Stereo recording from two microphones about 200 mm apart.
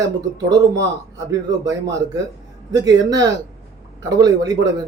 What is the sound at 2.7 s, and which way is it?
Speech, 20° right (ahead or behind).